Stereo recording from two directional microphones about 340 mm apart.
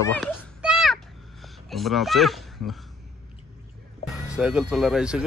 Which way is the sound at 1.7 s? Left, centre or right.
Centre.